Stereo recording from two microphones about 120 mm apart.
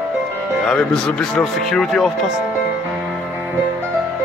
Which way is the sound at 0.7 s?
5° left (ahead or behind).